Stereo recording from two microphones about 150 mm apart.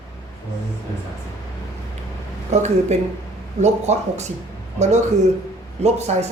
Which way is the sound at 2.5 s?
50° right (ahead or behind).